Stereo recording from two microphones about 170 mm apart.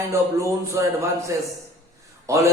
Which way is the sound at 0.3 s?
15° right (ahead or behind).